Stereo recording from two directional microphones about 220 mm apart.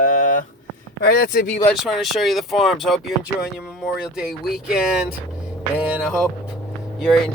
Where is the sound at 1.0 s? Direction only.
45° left (ahead or behind).